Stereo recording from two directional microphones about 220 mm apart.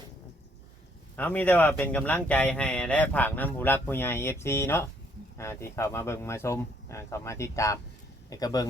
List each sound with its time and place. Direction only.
1.1 s speech: 5° left (ahead or behind)